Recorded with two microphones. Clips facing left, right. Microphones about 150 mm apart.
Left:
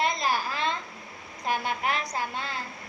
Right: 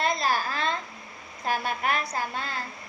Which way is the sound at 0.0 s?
15° left (ahead or behind).